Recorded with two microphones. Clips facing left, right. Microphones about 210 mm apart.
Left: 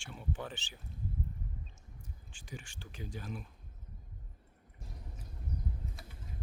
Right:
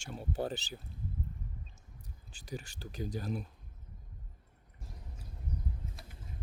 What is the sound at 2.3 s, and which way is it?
Speech, 40° right (ahead or behind).